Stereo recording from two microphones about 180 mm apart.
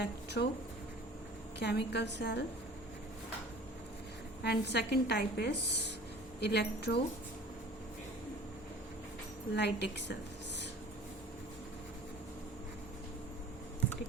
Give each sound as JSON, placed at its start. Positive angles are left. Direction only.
{"t": 0.0, "sound": "a sound", "side_deg": 70}
{"t": 1.5, "sound": "a woman's voice", "side_deg": 70}
{"t": 4.4, "sound": "a woman's voice", "side_deg": 65}
{"t": 9.6, "sound": "a woman's voice", "side_deg": 70}